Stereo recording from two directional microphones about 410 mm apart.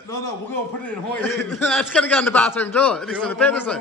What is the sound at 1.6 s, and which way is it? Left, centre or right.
A man's voice, centre.